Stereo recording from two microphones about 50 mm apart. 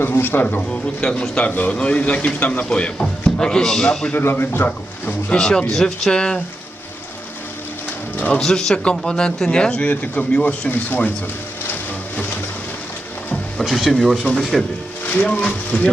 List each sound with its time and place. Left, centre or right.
0.0 s speech: left
0.7 s speech: centre
1.5 s speech: left
3.4 s speech: centre
4.1 s speech: left
5.4 s speech: centre
8.1 s music: left
8.4 s speech: centre; by 10.4 s left
10.7 s speech: left
13.6 s speech: centre
14.3 s speech: centre
15.0 s speech: left